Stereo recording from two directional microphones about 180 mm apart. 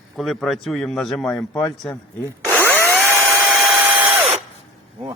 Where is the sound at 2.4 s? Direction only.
10° right (ahead or behind).